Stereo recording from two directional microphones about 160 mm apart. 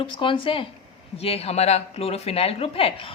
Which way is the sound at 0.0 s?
30° left (ahead or behind).